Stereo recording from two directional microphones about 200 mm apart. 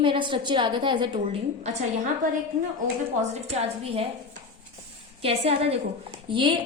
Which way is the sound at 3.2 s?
30° right (ahead or behind).